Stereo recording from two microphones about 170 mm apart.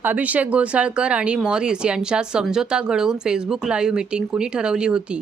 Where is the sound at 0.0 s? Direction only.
10° right (ahead or behind).